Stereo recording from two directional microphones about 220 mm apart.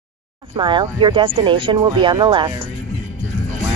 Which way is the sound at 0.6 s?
20° right (ahead or behind).